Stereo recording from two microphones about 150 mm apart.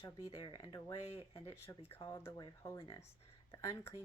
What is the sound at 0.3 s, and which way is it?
Speech, 30° left (ahead or behind).